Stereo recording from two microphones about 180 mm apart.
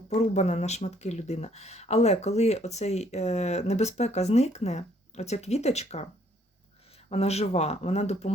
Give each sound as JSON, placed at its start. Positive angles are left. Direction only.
{"t": 0.1, "sound": "speech", "side_deg": 40}
{"t": 7.1, "sound": "speech", "side_deg": 35}